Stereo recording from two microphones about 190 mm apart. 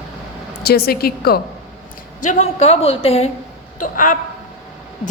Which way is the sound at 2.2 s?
40° left (ahead or behind).